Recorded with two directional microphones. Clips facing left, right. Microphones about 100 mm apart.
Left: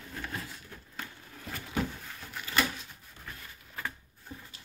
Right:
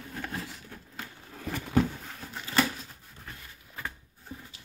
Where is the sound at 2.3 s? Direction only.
30° right (ahead or behind).